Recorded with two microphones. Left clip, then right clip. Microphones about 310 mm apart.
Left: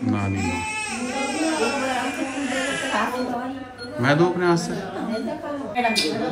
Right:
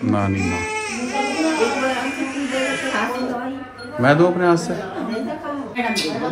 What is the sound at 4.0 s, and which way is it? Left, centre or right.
Speech, centre.